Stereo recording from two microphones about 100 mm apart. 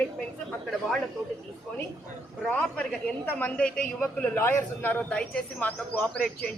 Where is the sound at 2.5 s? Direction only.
15° left (ahead or behind).